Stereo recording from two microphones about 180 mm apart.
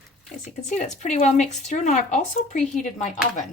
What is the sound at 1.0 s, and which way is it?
Speech, 40° left (ahead or behind).